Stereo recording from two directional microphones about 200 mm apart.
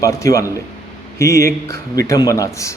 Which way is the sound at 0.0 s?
15° left (ahead or behind).